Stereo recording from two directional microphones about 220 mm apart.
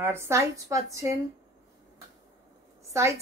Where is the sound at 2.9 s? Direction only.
15° right (ahead or behind).